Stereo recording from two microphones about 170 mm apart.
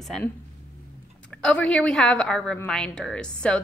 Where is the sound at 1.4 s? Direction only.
5° left (ahead or behind).